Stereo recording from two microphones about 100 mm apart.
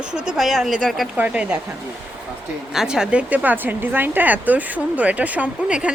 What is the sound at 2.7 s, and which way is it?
Speech, 5° right (ahead or behind).